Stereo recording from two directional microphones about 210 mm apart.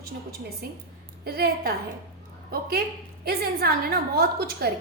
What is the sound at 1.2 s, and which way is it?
A woman's voice, 45° right (ahead or behind).